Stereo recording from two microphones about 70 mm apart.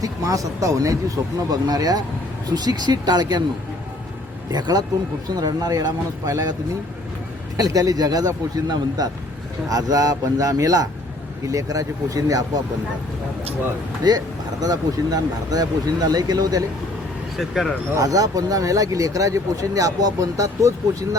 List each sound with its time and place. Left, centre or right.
0.0 s speech: right
4.5 s speech: right
5.3 s speech: right
7.5 s speech: right
9.6 s speech: right
14.0 s speech: right
17.3 s speech: centre
17.9 s speech: right